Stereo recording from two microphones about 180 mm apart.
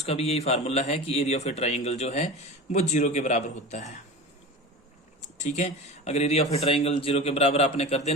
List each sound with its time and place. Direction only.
0.0 s speech: 35° left (ahead or behind)
5.2 s speech: 40° left (ahead or behind)